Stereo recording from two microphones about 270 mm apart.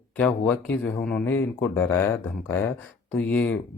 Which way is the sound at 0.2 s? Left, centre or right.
Centre.